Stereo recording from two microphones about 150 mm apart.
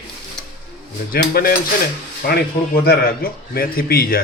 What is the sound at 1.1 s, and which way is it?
Speech, 80° left.